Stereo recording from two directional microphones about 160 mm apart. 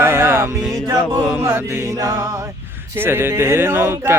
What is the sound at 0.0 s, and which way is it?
Music, 15° right (ahead or behind).